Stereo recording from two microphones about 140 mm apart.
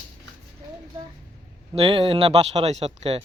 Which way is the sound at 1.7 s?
40° right (ahead or behind).